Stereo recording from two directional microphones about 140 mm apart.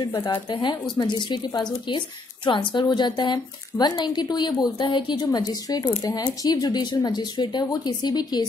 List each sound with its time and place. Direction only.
0.0 s a woman's voice: 30° left (ahead or behind)